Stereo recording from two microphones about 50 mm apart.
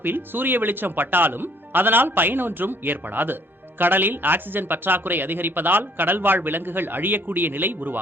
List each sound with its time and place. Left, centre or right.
0.0 s speech: right